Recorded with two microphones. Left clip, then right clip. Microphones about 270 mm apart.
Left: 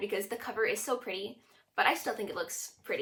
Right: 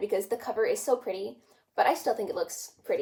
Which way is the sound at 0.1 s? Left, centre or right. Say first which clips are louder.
Right 6 dB; left.